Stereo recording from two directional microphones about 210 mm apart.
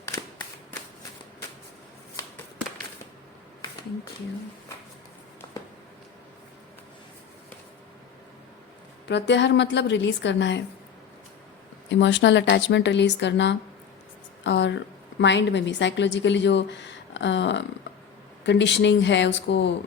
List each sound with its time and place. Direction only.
9.0 s a woman's voice: 55° left (ahead or behind)
11.9 s a woman's voice: 60° left (ahead or behind)